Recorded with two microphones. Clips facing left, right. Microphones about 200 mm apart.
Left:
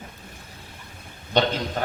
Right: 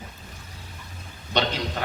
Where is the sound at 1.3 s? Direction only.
50° left (ahead or behind).